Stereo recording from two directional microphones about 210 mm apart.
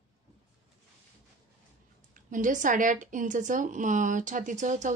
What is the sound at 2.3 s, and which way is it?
A woman's voice, 40° right (ahead or behind).